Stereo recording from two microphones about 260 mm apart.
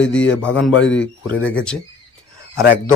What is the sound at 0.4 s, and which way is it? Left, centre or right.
Speech, centre.